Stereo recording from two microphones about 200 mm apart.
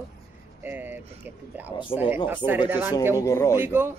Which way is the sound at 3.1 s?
15° left (ahead or behind).